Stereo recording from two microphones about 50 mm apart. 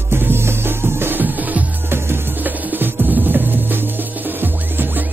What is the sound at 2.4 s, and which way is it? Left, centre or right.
Music, right.